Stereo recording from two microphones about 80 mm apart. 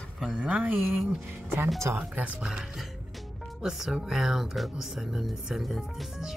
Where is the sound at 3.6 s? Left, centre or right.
Centre.